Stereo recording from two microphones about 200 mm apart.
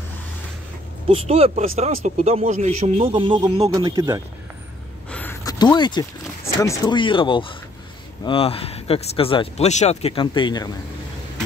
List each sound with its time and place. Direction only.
1.0 s a man's voice: 30° right (ahead or behind)
5.1 s speech: 10° left (ahead or behind)